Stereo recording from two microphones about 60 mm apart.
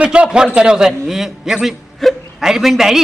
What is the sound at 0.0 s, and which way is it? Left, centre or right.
A man's voice, centre.